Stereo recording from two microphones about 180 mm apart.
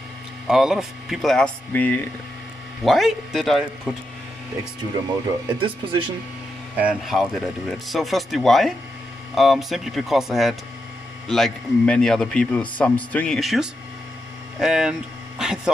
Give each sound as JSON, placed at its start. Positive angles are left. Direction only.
{"t": 0.5, "sound": "a man's voice", "side_deg": 0}
{"t": 5.5, "sound": "speech", "side_deg": -25}
{"t": 6.8, "sound": "a man's voice", "side_deg": -5}